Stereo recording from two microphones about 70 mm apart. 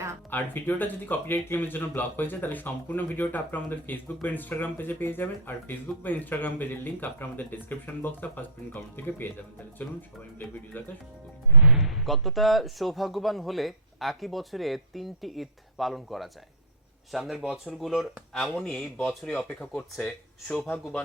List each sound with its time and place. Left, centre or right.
0.3 s speech: left
10.7 s speech: left
11.6 s speech: centre
18.4 s speech: centre